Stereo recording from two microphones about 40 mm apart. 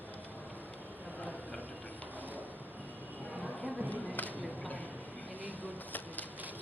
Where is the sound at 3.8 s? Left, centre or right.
Left.